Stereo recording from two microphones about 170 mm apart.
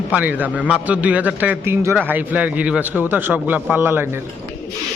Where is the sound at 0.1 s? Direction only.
10° right (ahead or behind).